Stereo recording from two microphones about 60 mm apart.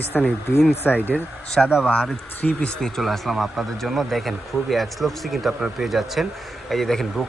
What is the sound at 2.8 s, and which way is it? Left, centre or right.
Speech, centre.